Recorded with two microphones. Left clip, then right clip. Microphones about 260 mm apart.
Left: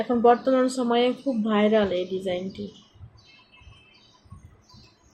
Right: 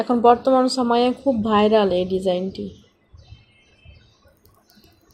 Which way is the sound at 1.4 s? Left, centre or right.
Right.